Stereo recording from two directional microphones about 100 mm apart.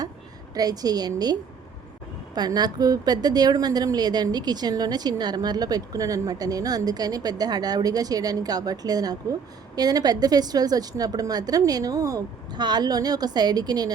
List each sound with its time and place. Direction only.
0.5 s a woman's voice: 40° right (ahead or behind)